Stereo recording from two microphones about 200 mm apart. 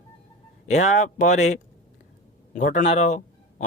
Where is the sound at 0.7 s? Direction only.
35° left (ahead or behind).